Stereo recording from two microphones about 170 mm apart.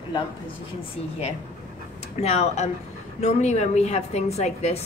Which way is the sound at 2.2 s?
40° left (ahead or behind).